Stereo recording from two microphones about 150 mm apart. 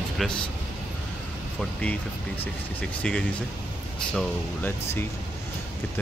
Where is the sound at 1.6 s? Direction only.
10° left (ahead or behind).